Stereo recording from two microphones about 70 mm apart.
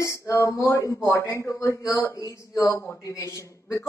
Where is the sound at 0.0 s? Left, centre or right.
Left.